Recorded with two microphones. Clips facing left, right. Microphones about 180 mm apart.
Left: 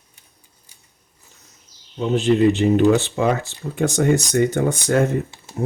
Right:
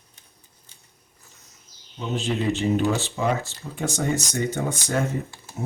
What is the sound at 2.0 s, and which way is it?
Speech, 65° left (ahead or behind).